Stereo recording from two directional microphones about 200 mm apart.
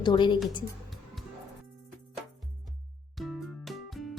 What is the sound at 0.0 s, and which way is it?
Speech, 20° left (ahead or behind).